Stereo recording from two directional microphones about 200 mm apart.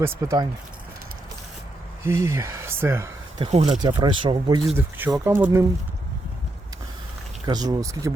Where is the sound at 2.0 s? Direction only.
15° right (ahead or behind).